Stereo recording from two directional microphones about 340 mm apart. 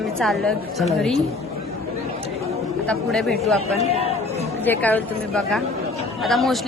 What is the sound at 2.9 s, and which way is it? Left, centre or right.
Speech, centre.